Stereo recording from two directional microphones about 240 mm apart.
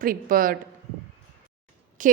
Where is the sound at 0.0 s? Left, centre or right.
Right.